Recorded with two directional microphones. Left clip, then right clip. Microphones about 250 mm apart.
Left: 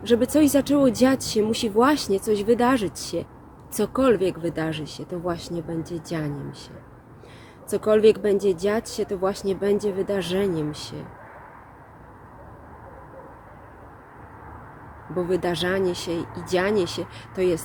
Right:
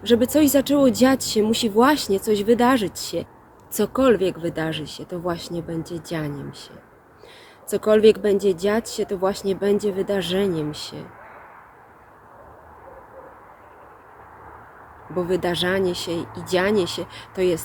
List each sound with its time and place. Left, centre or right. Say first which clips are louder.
0.0 s speech: right 2 dB; centre
7.7 s speech: right 2 dB; centre
15.1 s speech: right 2 dB; centre